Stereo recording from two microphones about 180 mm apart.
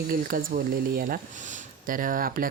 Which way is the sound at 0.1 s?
50° right (ahead or behind).